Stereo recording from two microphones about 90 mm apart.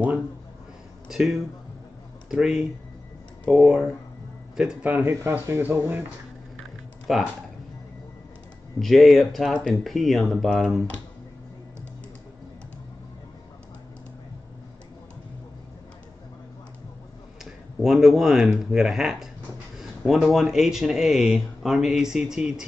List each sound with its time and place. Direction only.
1.0 s speech: 5° right (ahead or behind)
4.8 s speech: 20° right (ahead or behind)
7.1 s speech: centre (ahead or behind)
8.7 s speech: centre (ahead or behind)
17.8 s speech: centre (ahead or behind)